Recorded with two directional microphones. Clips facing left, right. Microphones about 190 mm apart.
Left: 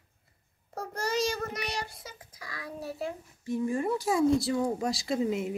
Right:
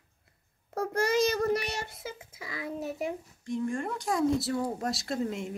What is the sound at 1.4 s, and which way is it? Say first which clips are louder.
A child's voice: right 6 dB; 30° right (ahead or behind).